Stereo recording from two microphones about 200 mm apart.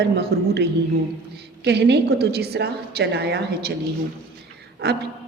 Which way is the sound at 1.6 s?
55° right (ahead or behind).